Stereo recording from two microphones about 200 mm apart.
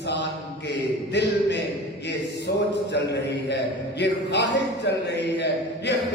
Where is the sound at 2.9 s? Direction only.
60° left (ahead or behind).